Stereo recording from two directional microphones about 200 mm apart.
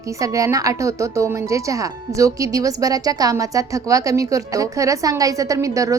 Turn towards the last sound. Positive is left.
turn(degrees=-15)  # may be behind; listen again after turning